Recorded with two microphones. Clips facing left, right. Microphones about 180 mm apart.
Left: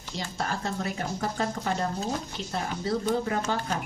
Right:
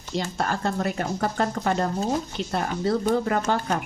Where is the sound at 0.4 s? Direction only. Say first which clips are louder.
Right 4 dB; 60° right (ahead or behind).